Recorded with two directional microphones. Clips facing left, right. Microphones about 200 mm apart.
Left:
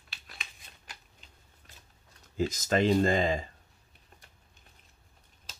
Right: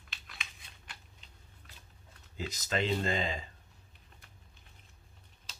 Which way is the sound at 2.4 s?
45° left (ahead or behind).